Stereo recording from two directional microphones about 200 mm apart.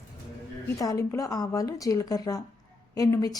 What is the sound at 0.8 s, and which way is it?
A woman's voice, 15° left (ahead or behind).